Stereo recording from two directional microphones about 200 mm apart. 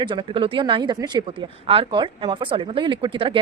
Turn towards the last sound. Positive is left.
turn(degrees=-25)  # may be behind; listen again after turning